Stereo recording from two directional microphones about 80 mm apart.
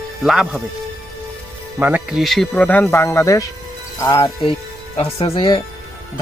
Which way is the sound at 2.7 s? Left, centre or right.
Centre.